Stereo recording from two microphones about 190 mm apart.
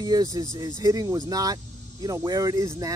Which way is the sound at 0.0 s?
20° right (ahead or behind).